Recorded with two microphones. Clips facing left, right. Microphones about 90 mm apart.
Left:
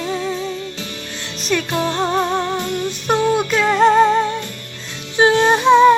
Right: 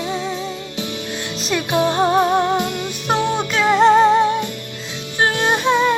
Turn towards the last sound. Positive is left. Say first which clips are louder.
# left 6 dB
turn(degrees=15)  # may be behind; listen again after turning